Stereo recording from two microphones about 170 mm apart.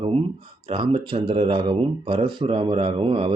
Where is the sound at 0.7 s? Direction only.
30° right (ahead or behind).